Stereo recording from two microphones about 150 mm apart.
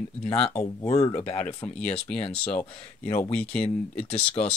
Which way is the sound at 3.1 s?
40° left (ahead or behind).